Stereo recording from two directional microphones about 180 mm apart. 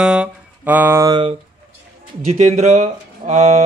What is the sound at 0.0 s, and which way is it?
Music, 5° right (ahead or behind).